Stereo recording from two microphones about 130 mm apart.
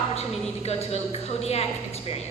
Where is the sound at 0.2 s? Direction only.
55° left (ahead or behind).